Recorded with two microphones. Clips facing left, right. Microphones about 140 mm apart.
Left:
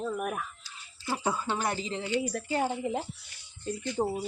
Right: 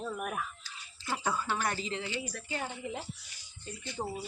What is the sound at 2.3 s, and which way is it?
Speech, 50° left (ahead or behind).